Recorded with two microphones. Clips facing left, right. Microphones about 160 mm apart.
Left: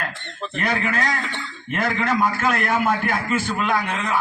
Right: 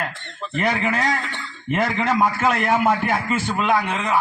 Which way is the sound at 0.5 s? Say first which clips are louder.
Right 2 dB; 20° right (ahead or behind).